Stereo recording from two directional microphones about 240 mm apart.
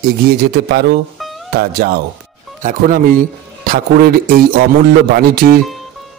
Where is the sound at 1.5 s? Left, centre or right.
Right.